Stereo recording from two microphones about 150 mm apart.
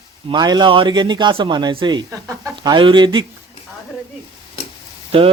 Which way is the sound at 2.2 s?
20° right (ahead or behind).